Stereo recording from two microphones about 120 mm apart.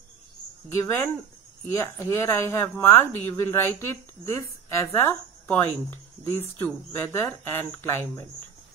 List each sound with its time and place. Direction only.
0.7 s speech: 20° left (ahead or behind)